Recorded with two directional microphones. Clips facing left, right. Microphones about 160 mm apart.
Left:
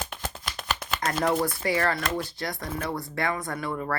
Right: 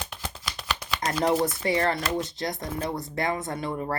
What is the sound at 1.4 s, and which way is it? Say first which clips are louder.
Speech: right 1 dB; 25° right (ahead or behind).